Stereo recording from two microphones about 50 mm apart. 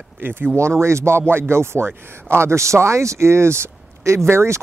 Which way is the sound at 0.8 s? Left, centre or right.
Right.